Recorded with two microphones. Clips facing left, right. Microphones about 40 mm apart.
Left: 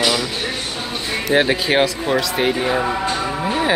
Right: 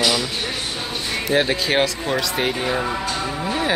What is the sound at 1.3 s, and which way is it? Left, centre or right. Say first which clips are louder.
Speech: left 3 dB; centre.